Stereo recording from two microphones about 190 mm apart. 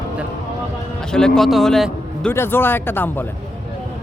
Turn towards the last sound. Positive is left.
turn(degrees=10)  # may be behind; listen again after turning